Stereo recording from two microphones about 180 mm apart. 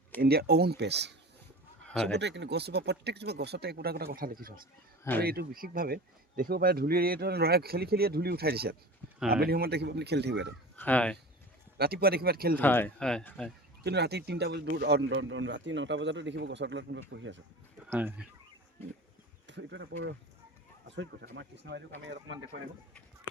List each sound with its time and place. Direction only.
0.2 s speech: 60° right (ahead or behind)
1.9 s speech: 5° left (ahead or behind)
2.1 s speech: 70° right (ahead or behind)
10.8 s speech: 10° left (ahead or behind)
11.8 s speech: 60° right (ahead or behind)
12.5 s speech: 10° left (ahead or behind)
13.8 s speech: 70° right (ahead or behind); by 17.4 s 90° right
17.9 s speech: 10° right (ahead or behind)
19.5 s speech: 80° right